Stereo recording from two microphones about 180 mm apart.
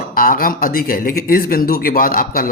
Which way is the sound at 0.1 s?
50° left (ahead or behind).